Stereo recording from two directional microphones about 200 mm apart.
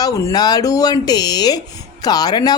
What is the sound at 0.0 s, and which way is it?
A woman's voice, 15° left (ahead or behind).